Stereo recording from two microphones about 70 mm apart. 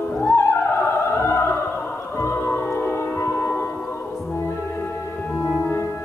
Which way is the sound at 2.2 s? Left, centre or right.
Left.